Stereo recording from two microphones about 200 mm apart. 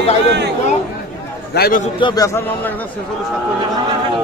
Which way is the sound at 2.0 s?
20° left (ahead or behind).